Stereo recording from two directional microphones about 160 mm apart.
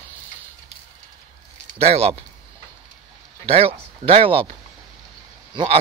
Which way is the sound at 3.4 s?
40° right (ahead or behind).